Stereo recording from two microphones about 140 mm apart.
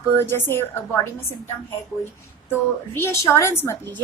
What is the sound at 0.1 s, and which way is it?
Speech, 15° left (ahead or behind).